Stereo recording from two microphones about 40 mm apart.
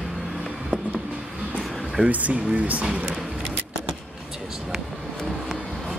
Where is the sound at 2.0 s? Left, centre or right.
Right.